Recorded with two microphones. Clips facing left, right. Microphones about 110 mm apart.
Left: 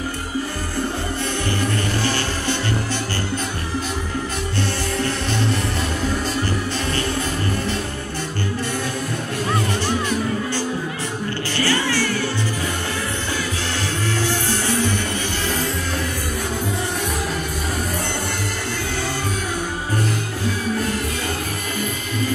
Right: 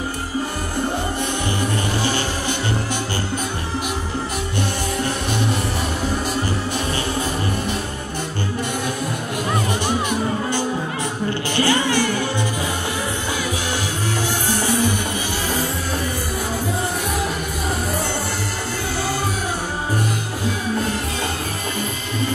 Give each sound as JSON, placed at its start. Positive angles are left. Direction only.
{"t": 1.6, "sound": "music", "side_deg": -15}
{"t": 4.6, "sound": "music", "side_deg": -15}
{"t": 9.8, "sound": "music", "side_deg": -15}
{"t": 14.2, "sound": "music", "side_deg": -15}